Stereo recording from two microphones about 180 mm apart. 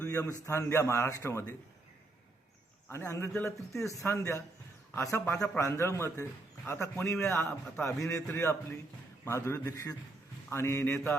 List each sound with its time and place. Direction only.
0.0 s a man's voice: 15° left (ahead or behind)
2.9 s a man's voice: 15° left (ahead or behind)